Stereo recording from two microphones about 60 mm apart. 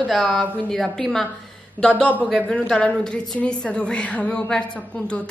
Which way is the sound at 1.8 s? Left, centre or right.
Left.